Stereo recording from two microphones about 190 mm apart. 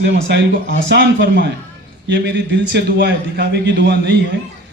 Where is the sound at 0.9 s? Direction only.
65° right (ahead or behind).